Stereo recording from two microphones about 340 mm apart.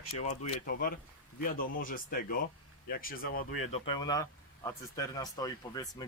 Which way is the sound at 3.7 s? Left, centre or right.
Centre.